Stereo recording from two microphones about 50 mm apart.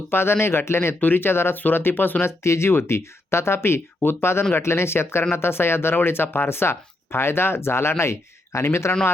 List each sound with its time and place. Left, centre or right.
0.1 s speech: left
0.9 s speech: left
2.2 s speech: left